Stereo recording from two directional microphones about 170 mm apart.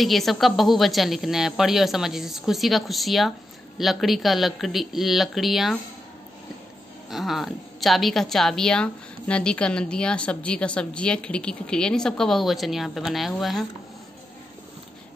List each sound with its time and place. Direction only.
0.0 s a woman's voice: centre (ahead or behind)
7.1 s a woman's voice: centre (ahead or behind)